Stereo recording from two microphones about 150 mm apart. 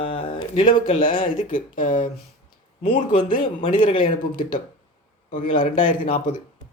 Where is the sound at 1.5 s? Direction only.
65° left (ahead or behind).